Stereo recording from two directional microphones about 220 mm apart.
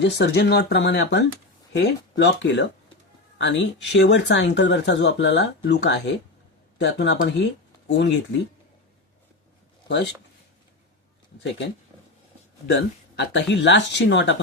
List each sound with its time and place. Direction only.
0.0 s speech: 50° left (ahead or behind)
12.6 s speech: 50° left (ahead or behind)